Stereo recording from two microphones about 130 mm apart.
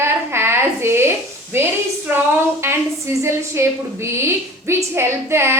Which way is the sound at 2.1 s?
15° right (ahead or behind).